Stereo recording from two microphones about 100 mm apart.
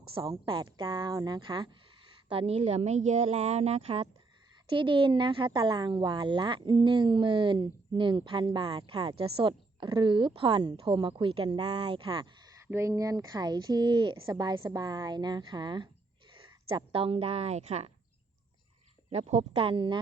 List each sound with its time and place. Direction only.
0.1 s speech: 55° right (ahead or behind)
2.3 s speech: 80° right
4.6 s speech: 60° right (ahead or behind)
12.7 s a woman's voice: 30° right (ahead or behind); by 17.9 s 90° right
19.1 s speech: 90° right; by 20.0 s 55° right (ahead or behind)